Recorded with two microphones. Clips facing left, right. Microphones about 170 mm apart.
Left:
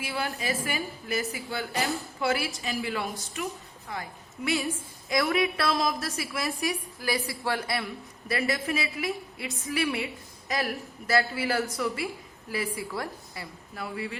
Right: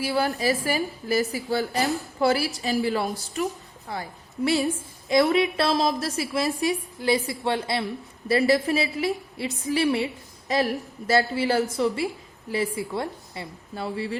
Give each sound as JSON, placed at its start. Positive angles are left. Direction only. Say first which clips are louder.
{"t": 0.0, "sound": "a woman's voice", "louder": "right 8 dB", "side_deg": -40}
{"t": 12.7, "sound": "a woman's voice", "louder": "right 5 dB", "side_deg": -25}